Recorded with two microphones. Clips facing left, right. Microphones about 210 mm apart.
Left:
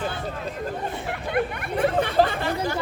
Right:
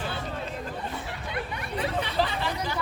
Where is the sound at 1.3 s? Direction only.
55° left (ahead or behind).